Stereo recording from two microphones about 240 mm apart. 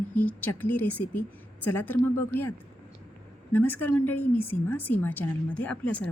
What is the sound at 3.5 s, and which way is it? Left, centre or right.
A woman's voice, centre.